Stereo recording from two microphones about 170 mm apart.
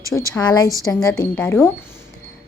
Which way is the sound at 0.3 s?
25° left (ahead or behind).